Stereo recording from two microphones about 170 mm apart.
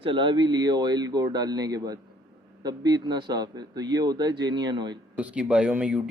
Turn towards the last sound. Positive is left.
turn(degrees=-5)  # may be behind; listen again after turning